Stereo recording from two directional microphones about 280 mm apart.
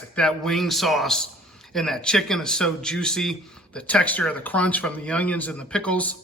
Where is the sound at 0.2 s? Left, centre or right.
Centre.